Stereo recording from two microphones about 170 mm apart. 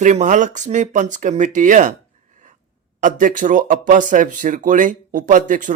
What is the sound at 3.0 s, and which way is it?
Speech, 50° right (ahead or behind).